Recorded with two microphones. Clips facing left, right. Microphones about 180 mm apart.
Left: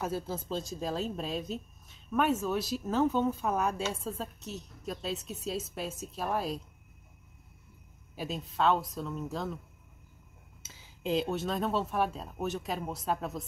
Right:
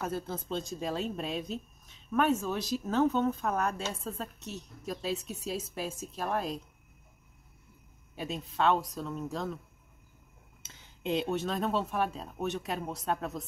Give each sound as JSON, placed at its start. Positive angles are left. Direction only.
{"t": 0.0, "sound": "speech", "side_deg": 5}
{"t": 8.2, "sound": "speech", "side_deg": 0}
{"t": 10.6, "sound": "speech", "side_deg": 5}